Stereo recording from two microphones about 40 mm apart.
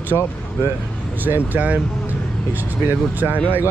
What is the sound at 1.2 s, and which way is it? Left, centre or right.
Speech, right.